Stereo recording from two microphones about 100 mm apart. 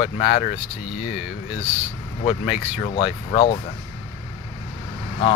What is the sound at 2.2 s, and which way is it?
Speech, 80° left.